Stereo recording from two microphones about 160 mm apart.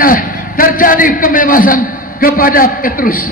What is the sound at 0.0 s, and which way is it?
A man's voice, 60° left (ahead or behind).